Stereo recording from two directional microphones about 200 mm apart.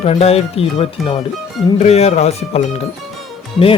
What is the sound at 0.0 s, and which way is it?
Speech, 30° left (ahead or behind).